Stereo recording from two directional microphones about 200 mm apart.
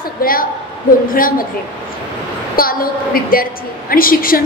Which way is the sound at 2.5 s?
45° left (ahead or behind).